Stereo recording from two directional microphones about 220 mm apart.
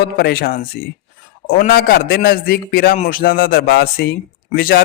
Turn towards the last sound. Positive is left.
turn(degrees=40)  # may be behind; listen again after turning